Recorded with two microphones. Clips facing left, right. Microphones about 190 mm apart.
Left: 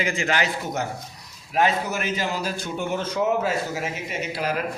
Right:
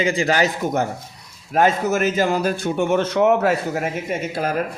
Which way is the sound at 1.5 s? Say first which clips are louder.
Right 5 dB; 45° right (ahead or behind).